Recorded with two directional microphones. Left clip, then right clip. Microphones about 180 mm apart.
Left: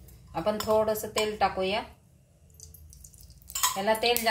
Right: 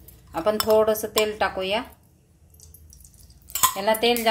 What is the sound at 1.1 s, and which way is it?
Speech, 40° right (ahead or behind).